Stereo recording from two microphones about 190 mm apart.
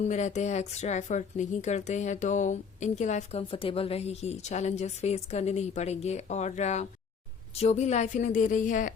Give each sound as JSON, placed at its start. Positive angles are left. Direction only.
{"t": 0.0, "sound": "speech", "side_deg": 40}